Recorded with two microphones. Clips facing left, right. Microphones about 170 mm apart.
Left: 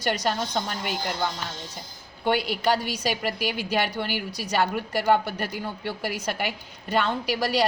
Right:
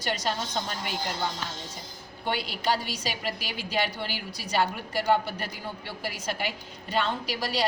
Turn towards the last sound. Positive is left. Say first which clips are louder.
# left 5 dB
turn(degrees=60)  # may be behind; listen again after turning